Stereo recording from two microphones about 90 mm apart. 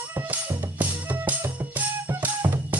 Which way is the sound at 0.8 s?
20° right (ahead or behind).